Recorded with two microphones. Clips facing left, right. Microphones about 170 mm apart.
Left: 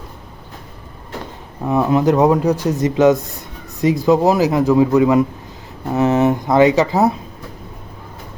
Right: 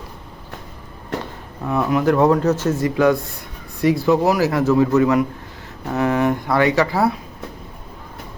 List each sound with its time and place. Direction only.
1.6 s speech: 15° left (ahead or behind)